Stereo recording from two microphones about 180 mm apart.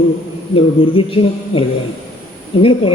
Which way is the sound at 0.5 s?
30° left (ahead or behind).